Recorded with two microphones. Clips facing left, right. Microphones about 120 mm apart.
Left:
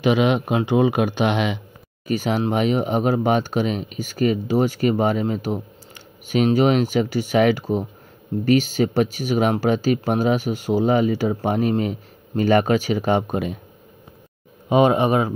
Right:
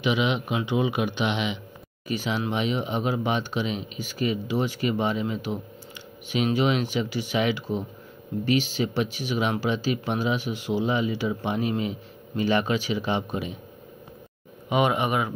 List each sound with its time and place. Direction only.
0.0 s speech: 45° left (ahead or behind)
14.7 s speech: 35° left (ahead or behind)